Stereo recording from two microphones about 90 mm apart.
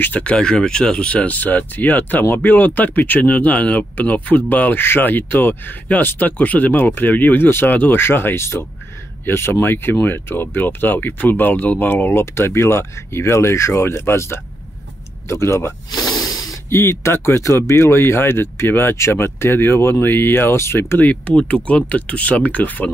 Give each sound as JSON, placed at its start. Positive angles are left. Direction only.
{"t": 0.0, "sound": "speech", "side_deg": 15}
{"t": 15.9, "sound": "snake", "side_deg": 50}
{"t": 16.7, "sound": "speech", "side_deg": 30}
{"t": 21.0, "sound": "speech", "side_deg": 15}